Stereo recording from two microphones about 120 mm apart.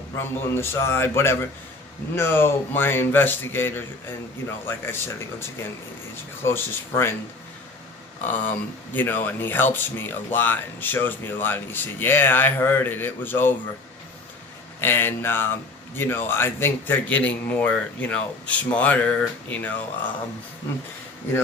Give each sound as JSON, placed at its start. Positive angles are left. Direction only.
{"t": 0.2, "sound": "speech", "side_deg": 20}
{"t": 6.4, "sound": "speech", "side_deg": 20}
{"t": 8.2, "sound": "speech", "side_deg": 15}
{"t": 14.8, "sound": "speech", "side_deg": 20}